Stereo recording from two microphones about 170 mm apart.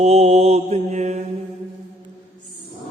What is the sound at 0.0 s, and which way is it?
A man's voice, 40° right (ahead or behind).